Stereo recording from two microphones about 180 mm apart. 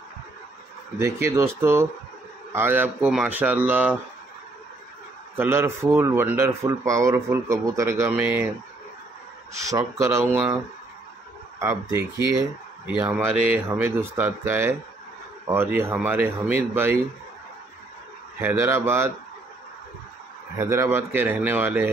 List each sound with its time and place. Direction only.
0.9 s speech: 15° right (ahead or behind)
5.4 s speech: 15° right (ahead or behind)
9.6 s speech: 15° right (ahead or behind)
11.6 s speech: 15° right (ahead or behind)
18.4 s speech: 15° right (ahead or behind)
20.5 s speech: 15° right (ahead or behind)